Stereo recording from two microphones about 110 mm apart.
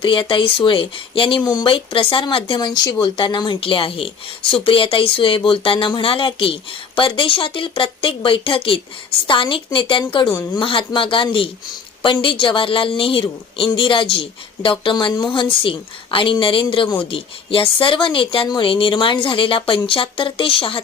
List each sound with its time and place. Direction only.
0.0 s speech: 50° left (ahead or behind)